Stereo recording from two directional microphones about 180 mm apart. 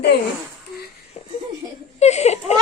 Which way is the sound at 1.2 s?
35° left (ahead or behind).